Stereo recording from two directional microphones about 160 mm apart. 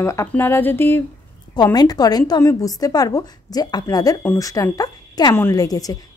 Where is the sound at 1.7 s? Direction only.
25° left (ahead or behind).